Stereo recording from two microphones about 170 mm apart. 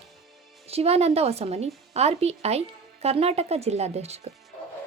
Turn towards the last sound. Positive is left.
turn(degrees=-40)  # may be behind; listen again after turning